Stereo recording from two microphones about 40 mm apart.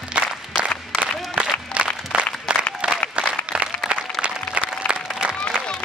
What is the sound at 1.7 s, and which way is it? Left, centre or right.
Applause, right.